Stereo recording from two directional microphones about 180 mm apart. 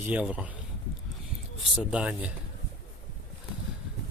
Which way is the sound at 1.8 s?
5° right (ahead or behind).